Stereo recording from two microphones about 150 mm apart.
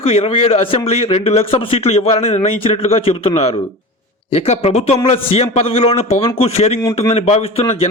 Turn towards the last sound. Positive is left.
turn(degrees=45)  # may be behind; listen again after turning